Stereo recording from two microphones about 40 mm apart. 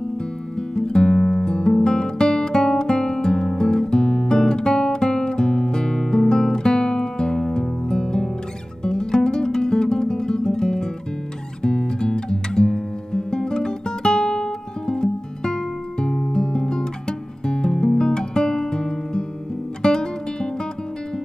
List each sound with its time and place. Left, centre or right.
0.6 s music: centre
8.8 s guitar: centre
16.3 s music: centre
17.5 s guitar: centre
19.8 s music: centre